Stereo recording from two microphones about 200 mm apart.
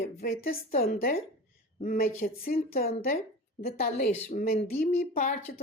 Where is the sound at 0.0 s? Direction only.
50° left (ahead or behind).